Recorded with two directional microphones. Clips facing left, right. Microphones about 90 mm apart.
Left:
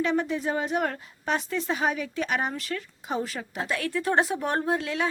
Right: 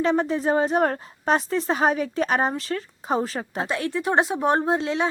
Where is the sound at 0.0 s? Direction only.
35° right (ahead or behind).